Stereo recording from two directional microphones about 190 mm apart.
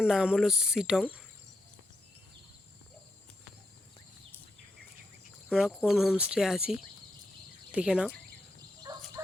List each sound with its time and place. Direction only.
0.0 s speech: 5° right (ahead or behind)
5.5 s speech: 5° right (ahead or behind)
8.9 s fowl: 20° right (ahead or behind)